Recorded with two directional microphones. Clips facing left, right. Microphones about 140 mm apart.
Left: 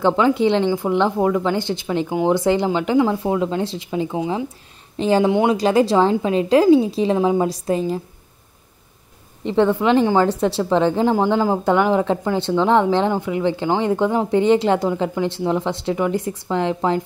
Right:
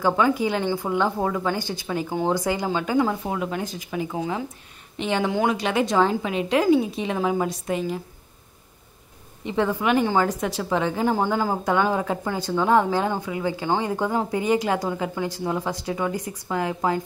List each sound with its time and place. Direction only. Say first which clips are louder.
0.0 s a woman's voice: left 5 dB; 25° left (ahead or behind)
4.9 s speech: left 8 dB; 35° left (ahead or behind)
5.3 s a woman's voice: left 6 dB; 25° left (ahead or behind)
5.6 s a woman's voice: left 6 dB; 35° left (ahead or behind)
9.7 s a woman's voice: left 5 dB; 25° left (ahead or behind)